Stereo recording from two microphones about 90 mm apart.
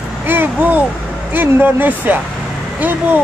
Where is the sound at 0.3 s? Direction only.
20° right (ahead or behind).